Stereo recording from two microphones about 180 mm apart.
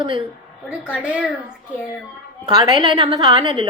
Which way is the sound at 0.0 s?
30° right (ahead or behind).